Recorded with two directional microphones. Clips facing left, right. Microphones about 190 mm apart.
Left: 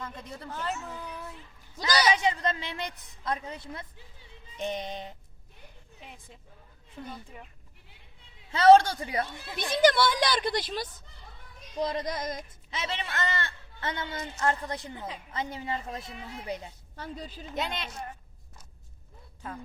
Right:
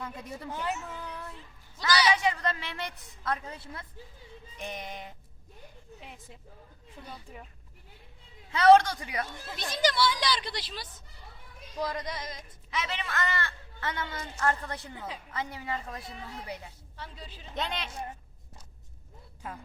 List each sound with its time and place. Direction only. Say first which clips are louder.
0.0 s a woman's voice: right 1 dB; 10° right (ahead or behind)
1.0 s child singing: left 1 dB; 5° left (ahead or behind)
1.9 s a sound: left 1 dB; 45° left (ahead or behind)
2.1 s a man's voice: left 1 dB; 20° left (ahead or behind)
8.5 s a woman's voice: left 2 dB; 30° left (ahead or behind)
9.6 s a woman's voice: left 5 dB; 55° left (ahead or behind)
11.8 s a man's voice: left 3 dB; 20° left (ahead or behind)
12.0 s a woman's voice: left 5 dB; 45° left (ahead or behind)
12.7 s a man's voice: even; 30° left (ahead or behind)
16.9 s a woman's voice: left 7 dB; 45° left (ahead or behind)
17.5 s speech: left 1 dB; 5° left (ahead or behind)